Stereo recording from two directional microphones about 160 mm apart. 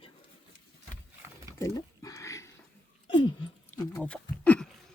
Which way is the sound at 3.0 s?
30° left (ahead or behind).